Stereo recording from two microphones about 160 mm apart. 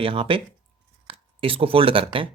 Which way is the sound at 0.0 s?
35° right (ahead or behind).